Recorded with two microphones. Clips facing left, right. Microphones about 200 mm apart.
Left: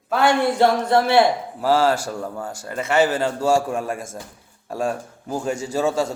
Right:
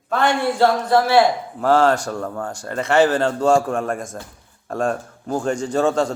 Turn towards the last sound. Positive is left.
turn(degrees=5)  # may be behind; listen again after turning